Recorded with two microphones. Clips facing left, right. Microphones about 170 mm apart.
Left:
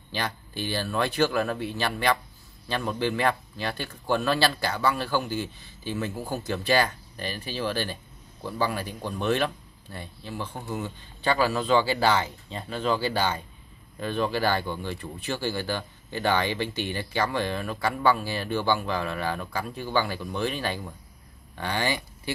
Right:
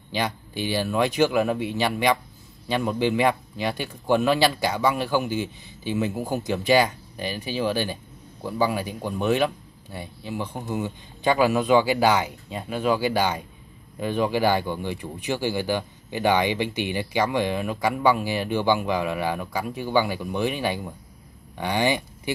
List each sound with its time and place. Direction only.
0.1 s speech: 15° right (ahead or behind)